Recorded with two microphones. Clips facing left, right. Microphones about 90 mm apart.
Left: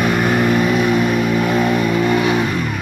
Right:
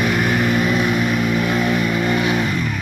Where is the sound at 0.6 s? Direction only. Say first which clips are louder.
Left 3 dB; 25° left (ahead or behind).